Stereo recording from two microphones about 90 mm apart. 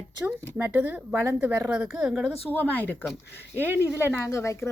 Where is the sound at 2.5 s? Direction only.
20° left (ahead or behind).